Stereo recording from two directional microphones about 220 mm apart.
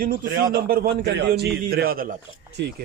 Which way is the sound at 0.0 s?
40° right (ahead or behind).